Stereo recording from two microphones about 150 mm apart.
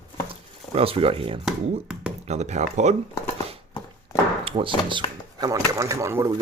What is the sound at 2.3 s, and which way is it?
Speech, 50° right (ahead or behind).